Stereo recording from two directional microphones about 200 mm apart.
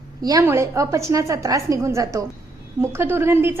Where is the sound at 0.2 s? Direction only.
20° right (ahead or behind).